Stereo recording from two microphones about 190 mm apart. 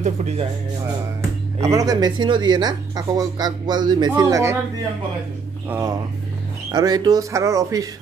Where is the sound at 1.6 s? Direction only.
15° right (ahead or behind).